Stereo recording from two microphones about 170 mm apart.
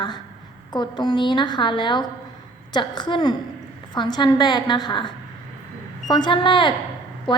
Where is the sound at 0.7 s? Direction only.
25° left (ahead or behind).